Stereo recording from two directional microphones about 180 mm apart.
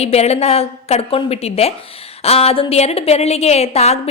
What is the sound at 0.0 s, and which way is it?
A woman's voice, 35° left (ahead or behind).